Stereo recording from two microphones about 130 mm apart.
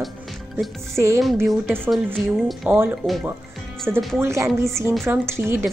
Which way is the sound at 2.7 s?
15° right (ahead or behind).